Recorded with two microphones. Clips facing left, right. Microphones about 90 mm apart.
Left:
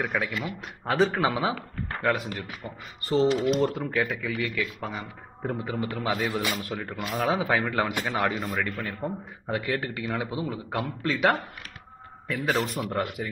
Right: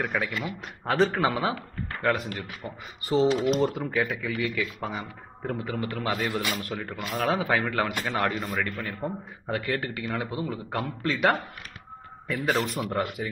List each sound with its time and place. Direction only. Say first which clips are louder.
0.0 s speech: even; 5° left (ahead or behind)
5.5 s a man's voice: even; 20° left (ahead or behind)
5.9 s speech: left 1 dB; 5° left (ahead or behind)
7.9 s speech: even; 15° left (ahead or behind); by 13.3 s centre (ahead or behind)